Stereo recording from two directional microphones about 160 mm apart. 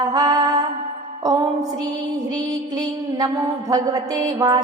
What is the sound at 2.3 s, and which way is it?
Mantra, 25° right (ahead or behind).